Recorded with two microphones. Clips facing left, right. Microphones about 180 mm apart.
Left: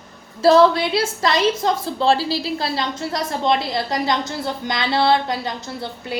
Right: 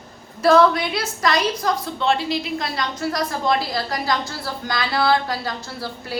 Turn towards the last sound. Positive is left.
turn(degrees=20)  # may be behind; listen again after turning